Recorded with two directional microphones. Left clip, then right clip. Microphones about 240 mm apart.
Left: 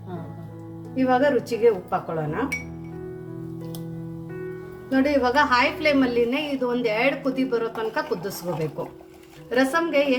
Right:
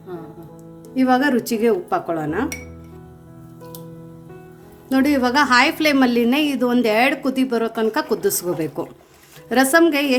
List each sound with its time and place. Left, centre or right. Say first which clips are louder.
0.9 s a woman's voice: right 2 dB; right
4.9 s a woman's voice: right 3 dB; right
9.5 s a woman's voice: right 6 dB; right